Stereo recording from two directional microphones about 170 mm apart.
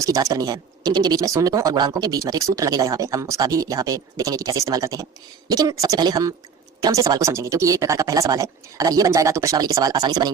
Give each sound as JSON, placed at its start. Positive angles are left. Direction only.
{"t": 0.0, "sound": "speech", "side_deg": -20}